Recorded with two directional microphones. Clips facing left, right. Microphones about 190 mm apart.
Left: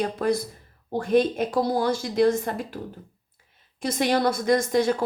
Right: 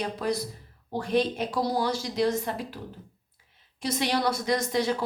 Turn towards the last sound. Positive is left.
turn(degrees=50)  # may be behind; listen again after turning